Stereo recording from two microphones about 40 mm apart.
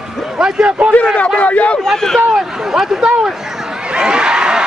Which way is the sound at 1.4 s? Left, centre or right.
Left.